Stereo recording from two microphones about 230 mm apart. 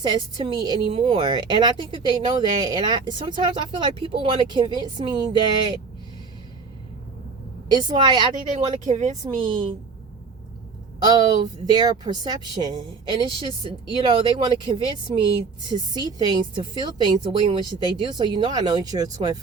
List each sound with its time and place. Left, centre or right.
0.0 s a woman's voice: centre
7.7 s a woman's voice: centre
8.4 s a woman's voice: right
11.0 s a woman's voice: centre